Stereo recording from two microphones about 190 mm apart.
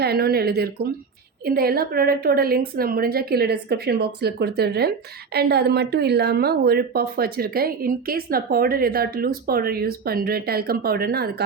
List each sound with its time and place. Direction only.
0.0 s a woman's voice: 55° right (ahead or behind)